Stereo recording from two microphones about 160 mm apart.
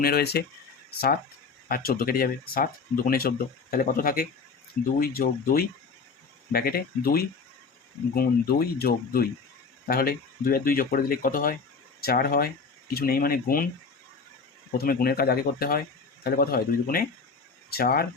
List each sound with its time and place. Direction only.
0.0 s speech: 75° left (ahead or behind)
1.6 s speech: 65° left (ahead or behind)
14.7 s speech: 65° left (ahead or behind)